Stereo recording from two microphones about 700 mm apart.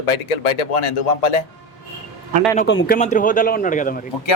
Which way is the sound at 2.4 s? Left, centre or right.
Centre.